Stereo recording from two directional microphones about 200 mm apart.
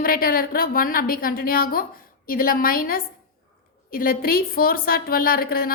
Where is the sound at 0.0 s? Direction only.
45° left (ahead or behind).